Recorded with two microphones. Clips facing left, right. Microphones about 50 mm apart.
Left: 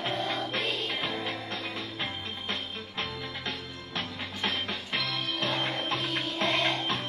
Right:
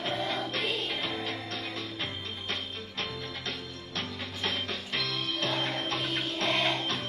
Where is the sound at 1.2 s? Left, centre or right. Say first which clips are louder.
Left 1 dB; centre.